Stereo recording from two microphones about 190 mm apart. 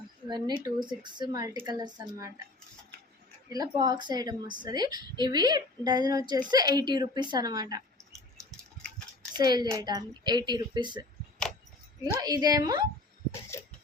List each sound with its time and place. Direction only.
0.3 s a woman's voice: 25° right (ahead or behind)
3.5 s a woman's voice: 20° right (ahead or behind)
8.4 s a sound: 5° left (ahead or behind)
9.4 s a woman's voice: 20° right (ahead or behind)
12.2 s a woman's voice: 20° right (ahead or behind)
13.5 s a sound: 15° left (ahead or behind)